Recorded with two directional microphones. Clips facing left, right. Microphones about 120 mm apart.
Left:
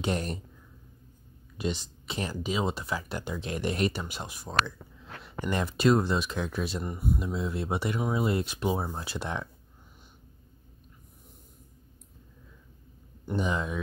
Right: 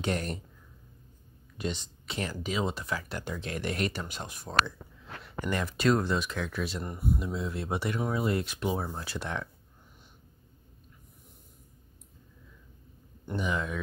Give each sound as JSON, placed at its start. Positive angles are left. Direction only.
{"t": 0.0, "sound": "speech", "side_deg": 20}
{"t": 1.6, "sound": "speech", "side_deg": 15}
{"t": 5.2, "sound": "speech", "side_deg": 20}
{"t": 13.4, "sound": "speech", "side_deg": 25}